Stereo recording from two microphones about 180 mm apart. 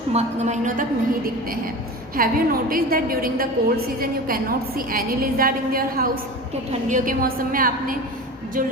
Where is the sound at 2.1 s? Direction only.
55° right (ahead or behind).